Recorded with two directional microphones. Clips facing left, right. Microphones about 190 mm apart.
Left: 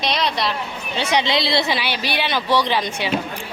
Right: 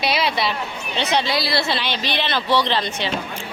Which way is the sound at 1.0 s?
15° left (ahead or behind).